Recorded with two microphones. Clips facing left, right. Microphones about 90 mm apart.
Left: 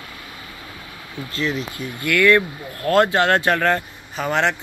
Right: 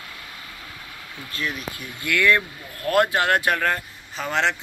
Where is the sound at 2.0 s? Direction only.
15° right (ahead or behind); by 4.5 s 5° left (ahead or behind).